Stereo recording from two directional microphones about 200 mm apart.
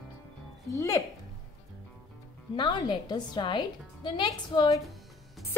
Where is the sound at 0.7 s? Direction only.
15° left (ahead or behind).